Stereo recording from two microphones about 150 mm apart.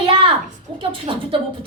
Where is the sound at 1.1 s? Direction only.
35° right (ahead or behind).